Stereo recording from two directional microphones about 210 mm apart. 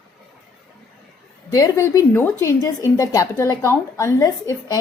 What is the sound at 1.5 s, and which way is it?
A woman's voice, 15° left (ahead or behind).